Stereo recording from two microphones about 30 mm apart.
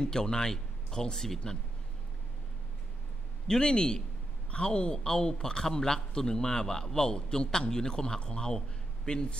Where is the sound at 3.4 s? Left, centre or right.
Left.